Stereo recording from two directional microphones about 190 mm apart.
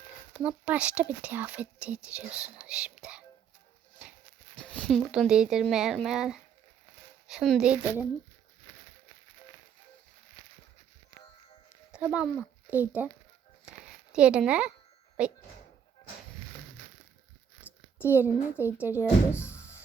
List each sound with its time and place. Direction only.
0.3 s speech: 5° right (ahead or behind)
4.6 s speech: 5° left (ahead or behind)
11.9 s speech: 5° right (ahead or behind)
14.1 s speech: 5° right (ahead or behind)
18.1 s speech: 10° right (ahead or behind)
19.0 s speech: 15° left (ahead or behind)